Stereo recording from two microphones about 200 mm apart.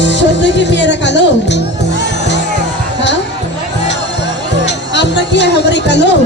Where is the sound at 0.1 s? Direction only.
60° left (ahead or behind).